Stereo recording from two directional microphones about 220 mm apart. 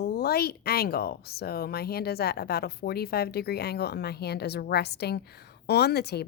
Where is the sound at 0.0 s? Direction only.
45° left (ahead or behind).